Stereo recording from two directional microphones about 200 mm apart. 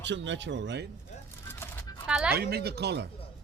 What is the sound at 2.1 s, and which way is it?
Speech, 5° right (ahead or behind).